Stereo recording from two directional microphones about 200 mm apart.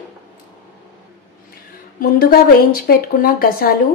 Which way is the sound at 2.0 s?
45° left (ahead or behind).